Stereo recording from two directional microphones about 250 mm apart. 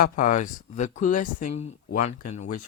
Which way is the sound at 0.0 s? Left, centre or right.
Left.